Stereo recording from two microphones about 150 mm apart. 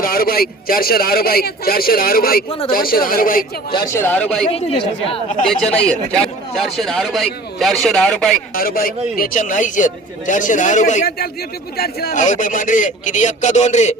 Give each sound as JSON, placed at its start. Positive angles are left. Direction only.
{"t": 0.0, "sound": "speech", "side_deg": 80}
{"t": 3.9, "sound": "speech", "side_deg": 10}
{"t": 4.4, "sound": "speech", "side_deg": 40}
{"t": 5.7, "sound": "a man's voice", "side_deg": 5}
{"t": 8.5, "sound": "speech", "side_deg": 75}
{"t": 11.8, "sound": "speech", "side_deg": 90}
{"t": 12.2, "sound": "speech", "side_deg": 60}